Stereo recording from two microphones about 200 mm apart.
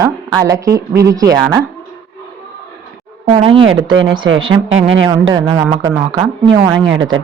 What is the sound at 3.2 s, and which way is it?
Speech, 30° right (ahead or behind).